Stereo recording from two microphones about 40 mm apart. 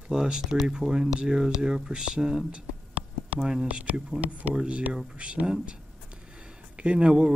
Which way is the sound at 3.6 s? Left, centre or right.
Right.